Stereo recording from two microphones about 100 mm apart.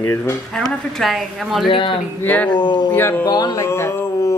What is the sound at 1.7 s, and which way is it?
Speech, 50° left (ahead or behind).